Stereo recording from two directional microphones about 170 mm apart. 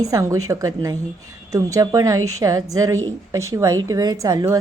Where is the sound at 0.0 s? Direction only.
20° right (ahead or behind).